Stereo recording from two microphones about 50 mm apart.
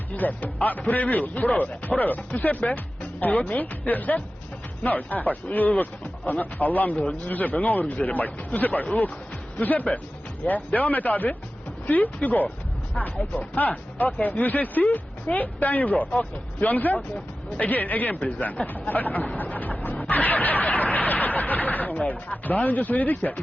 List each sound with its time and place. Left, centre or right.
0.2 s speech: left
18.2 s speech: left
19.4 s snicker: left
22.6 s speech: left